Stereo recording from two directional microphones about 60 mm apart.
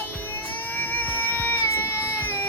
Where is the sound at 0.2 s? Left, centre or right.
Left.